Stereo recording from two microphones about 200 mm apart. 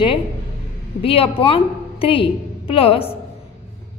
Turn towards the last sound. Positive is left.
turn(degrees=30)  # may be behind; listen again after turning